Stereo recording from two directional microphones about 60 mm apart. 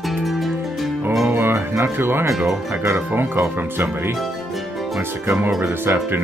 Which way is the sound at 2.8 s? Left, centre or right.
Right.